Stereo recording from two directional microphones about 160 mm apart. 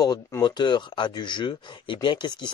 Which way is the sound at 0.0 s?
25° left (ahead or behind).